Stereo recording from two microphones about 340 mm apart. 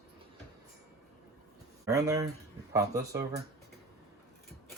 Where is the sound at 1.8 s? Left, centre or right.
Centre.